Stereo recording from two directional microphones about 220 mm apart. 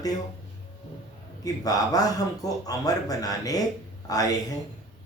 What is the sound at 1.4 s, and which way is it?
Speech, 15° left (ahead or behind).